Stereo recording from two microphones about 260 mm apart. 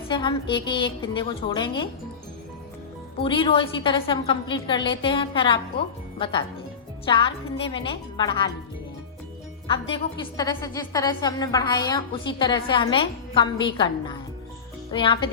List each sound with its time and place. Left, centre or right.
0.1 s a woman's voice: centre
3.2 s a woman's voice: centre
9.6 s a woman's voice: centre